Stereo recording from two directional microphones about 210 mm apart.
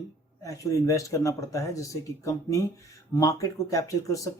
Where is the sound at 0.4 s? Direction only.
15° left (ahead or behind).